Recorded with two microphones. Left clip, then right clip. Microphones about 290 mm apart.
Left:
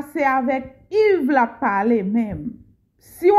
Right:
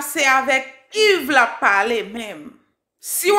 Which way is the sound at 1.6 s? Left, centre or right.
Centre.